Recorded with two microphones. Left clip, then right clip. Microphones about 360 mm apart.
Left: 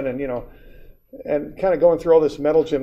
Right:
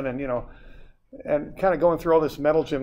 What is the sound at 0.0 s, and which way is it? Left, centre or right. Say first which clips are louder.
Speech: left 3 dB; right.